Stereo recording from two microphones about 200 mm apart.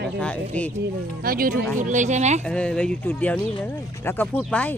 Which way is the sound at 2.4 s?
5° left (ahead or behind).